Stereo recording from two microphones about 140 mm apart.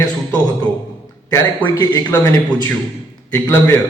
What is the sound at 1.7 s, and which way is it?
Speech, 25° left (ahead or behind).